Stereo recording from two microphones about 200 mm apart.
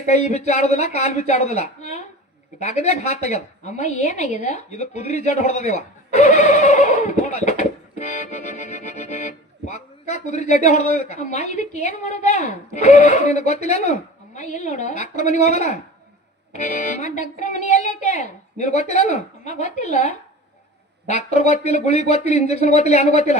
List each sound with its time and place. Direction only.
0.0 s a woman's voice: 35° left (ahead or behind)
7.4 s music: 35° left (ahead or behind)
9.7 s a woman's voice: 35° left (ahead or behind)